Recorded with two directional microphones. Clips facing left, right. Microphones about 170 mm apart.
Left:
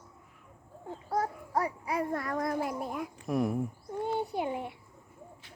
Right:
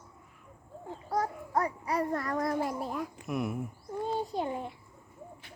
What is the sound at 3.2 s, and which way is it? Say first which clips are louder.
Speech: left 7 dB; 35° left (ahead or behind).